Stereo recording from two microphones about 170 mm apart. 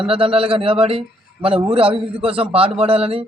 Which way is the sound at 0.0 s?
35° right (ahead or behind).